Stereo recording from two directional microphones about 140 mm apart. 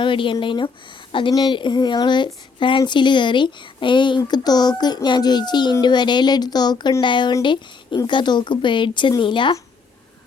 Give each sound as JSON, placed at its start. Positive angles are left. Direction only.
{"t": 0.0, "sound": "speech", "side_deg": 35}